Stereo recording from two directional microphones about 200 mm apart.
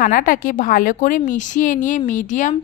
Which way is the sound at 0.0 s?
45° left (ahead or behind).